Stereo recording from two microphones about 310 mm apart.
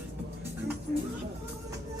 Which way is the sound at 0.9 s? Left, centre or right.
Right.